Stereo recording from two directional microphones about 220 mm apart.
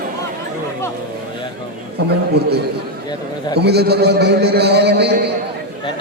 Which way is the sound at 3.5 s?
50° right (ahead or behind).